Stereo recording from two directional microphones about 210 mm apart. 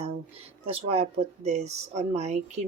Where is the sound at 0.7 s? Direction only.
30° right (ahead or behind).